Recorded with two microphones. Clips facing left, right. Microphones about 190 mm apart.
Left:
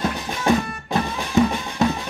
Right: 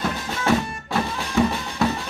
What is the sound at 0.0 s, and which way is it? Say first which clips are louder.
Music: left 2 dB; 15° left (ahead or behind).